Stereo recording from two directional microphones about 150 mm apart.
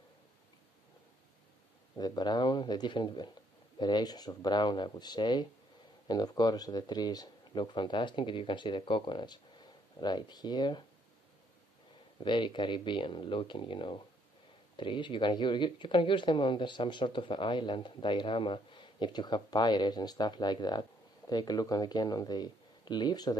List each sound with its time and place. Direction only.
2.0 s speech: 30° left (ahead or behind)
12.2 s speech: 30° left (ahead or behind)